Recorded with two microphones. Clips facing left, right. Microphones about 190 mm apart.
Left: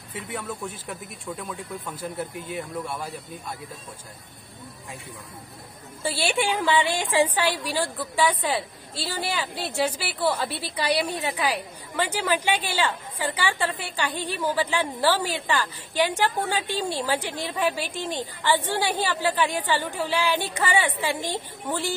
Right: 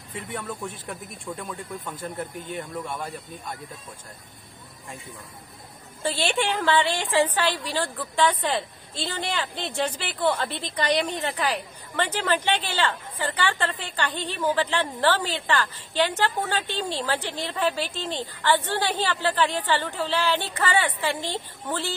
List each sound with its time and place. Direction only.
0.1 s speech: 5° left (ahead or behind)
6.0 s a woman's voice: 10° left (ahead or behind)